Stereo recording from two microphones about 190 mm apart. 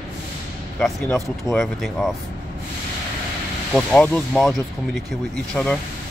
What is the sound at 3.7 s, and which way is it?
Speech, 5° left (ahead or behind).